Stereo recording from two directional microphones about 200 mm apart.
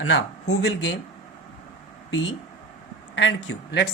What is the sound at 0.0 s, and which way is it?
Speech, 75° left (ahead or behind).